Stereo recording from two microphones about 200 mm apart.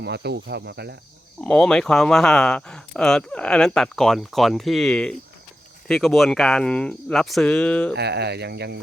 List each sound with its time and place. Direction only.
0.0 s speech: 55° right (ahead or behind)
1.4 s speech: 5° left (ahead or behind)
7.9 s speech: 55° right (ahead or behind)